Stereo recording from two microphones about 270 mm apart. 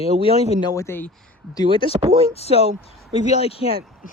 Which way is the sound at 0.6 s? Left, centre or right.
Centre.